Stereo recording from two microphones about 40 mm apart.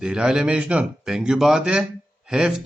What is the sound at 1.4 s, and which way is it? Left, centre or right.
A man's voice, centre.